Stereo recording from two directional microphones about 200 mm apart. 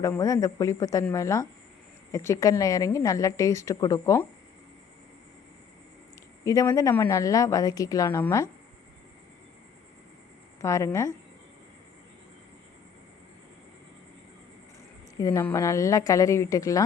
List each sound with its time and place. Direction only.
0.0 s a woman's voice: 15° left (ahead or behind)
6.4 s a woman's voice: 15° left (ahead or behind)
10.6 s a woman's voice: 15° left (ahead or behind)
15.2 s a woman's voice: 15° left (ahead or behind)